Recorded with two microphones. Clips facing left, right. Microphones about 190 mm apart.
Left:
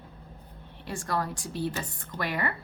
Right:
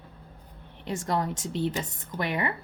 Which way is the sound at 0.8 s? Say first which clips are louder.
Right 3 dB; 20° right (ahead or behind).